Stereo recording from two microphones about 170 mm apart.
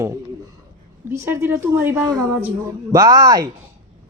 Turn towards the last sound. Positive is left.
turn(degrees=-25)  # may be behind; listen again after turning